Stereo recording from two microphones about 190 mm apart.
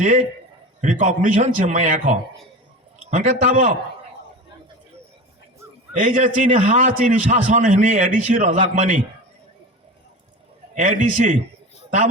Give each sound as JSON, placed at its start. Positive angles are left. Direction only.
{"t": 0.8, "sound": "a man's voice", "side_deg": -40}
{"t": 6.0, "sound": "a man's voice", "side_deg": -40}
{"t": 10.8, "sound": "a man's voice", "side_deg": -40}